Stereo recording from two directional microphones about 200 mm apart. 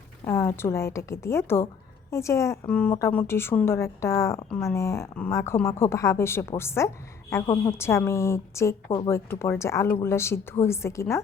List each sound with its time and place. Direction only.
0.3 s a woman's voice: 10° left (ahead or behind)